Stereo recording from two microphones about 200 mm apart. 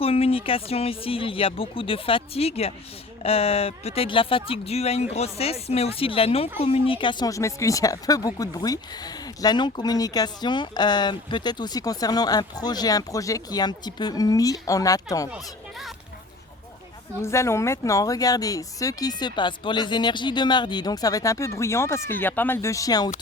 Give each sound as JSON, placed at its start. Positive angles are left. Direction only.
{"t": 0.0, "sound": "speech", "side_deg": 30}
{"t": 17.2, "sound": "speech", "side_deg": 15}